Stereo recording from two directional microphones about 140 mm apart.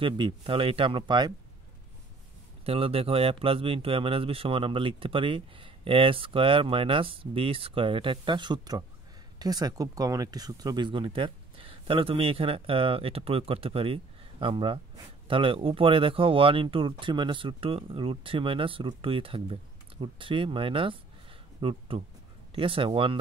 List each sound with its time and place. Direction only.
0.0 s speech: 40° right (ahead or behind)
2.6 s speech: 45° right (ahead or behind)